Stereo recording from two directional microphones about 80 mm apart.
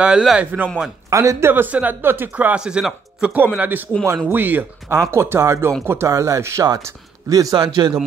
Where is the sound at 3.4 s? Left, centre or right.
Right.